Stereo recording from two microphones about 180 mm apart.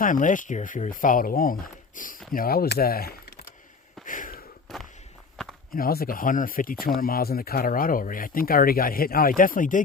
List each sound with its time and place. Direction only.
0.0 s speech: 45° left (ahead or behind)
4.0 s sniff: 45° left (ahead or behind)
4.7 s walk: 5° left (ahead or behind)
5.4 s a sound: 5° left (ahead or behind)
5.7 s speech: 55° left (ahead or behind)